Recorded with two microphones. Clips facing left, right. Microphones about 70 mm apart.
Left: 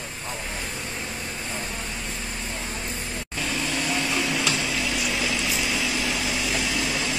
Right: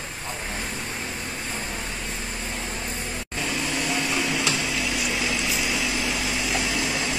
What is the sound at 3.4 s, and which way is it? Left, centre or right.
Vacuum cleaner, centre.